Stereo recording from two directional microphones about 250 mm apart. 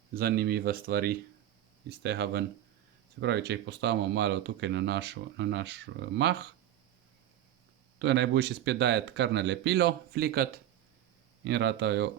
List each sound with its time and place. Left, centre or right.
0.1 s speech: right
7.9 s speech: right